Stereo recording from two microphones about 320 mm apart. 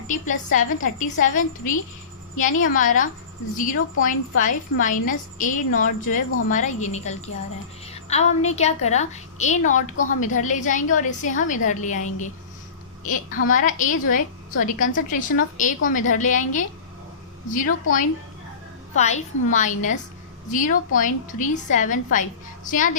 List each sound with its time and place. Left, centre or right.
0.1 s a woman's voice: left
18.9 s a woman's voice: left